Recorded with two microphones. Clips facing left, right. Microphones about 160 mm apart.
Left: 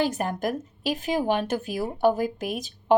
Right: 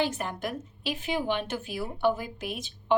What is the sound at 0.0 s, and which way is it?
A woman's voice, 40° left (ahead or behind).